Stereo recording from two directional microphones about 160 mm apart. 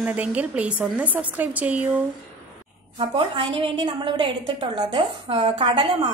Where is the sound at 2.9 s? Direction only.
35° right (ahead or behind).